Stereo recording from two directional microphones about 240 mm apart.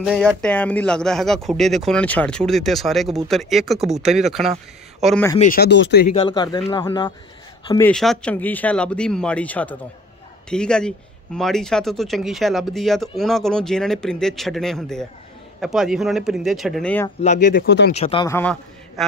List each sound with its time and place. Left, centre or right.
0.0 s speech: centre
5.4 s speech: left
6.1 s speech: centre
7.8 s speech: centre
17.4 s speech: left
17.9 s a man's voice: left; by 19.0 s centre